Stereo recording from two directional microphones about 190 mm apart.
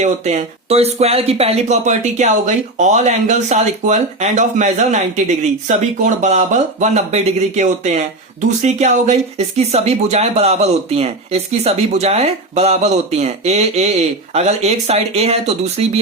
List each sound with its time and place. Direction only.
0.0 s speech: 35° right (ahead or behind)